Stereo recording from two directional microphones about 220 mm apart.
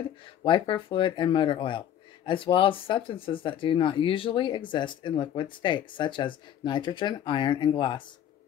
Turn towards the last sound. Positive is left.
turn(degrees=20)  # may be behind; listen again after turning